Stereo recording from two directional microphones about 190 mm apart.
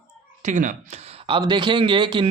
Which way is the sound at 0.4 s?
40° right (ahead or behind).